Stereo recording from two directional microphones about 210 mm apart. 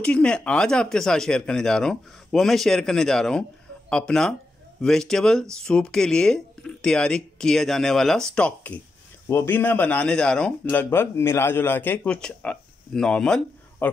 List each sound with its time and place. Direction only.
0.0 s speech: 5° left (ahead or behind)